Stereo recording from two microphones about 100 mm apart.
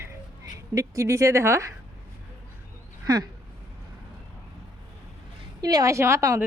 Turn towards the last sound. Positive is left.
turn(degrees=-30)  # may be behind; listen again after turning